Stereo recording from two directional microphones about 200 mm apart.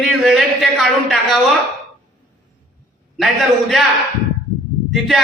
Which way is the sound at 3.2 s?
Centre (ahead or behind).